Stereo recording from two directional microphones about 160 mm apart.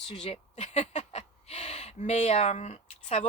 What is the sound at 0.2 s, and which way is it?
A woman's voice, 45° left (ahead or behind).